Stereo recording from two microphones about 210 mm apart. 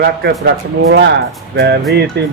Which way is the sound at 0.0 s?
50° right (ahead or behind).